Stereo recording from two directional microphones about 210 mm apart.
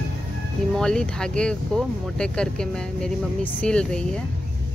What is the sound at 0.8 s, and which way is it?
Speech, 5° left (ahead or behind).